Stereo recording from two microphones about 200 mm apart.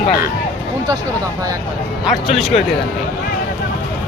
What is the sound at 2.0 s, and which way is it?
Speech, centre (ahead or behind).